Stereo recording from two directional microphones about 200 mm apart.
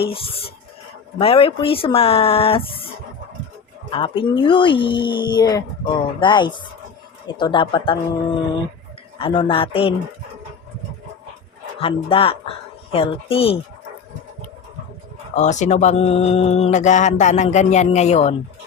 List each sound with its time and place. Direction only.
0.0 s speech: 30° left (ahead or behind)
3.9 s speech: 25° left (ahead or behind)
9.1 s speech: 25° left (ahead or behind)
11.8 s speech: 25° left (ahead or behind)
15.4 s speech: 35° left (ahead or behind)